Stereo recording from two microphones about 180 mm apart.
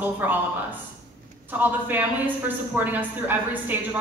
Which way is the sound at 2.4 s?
10° right (ahead or behind).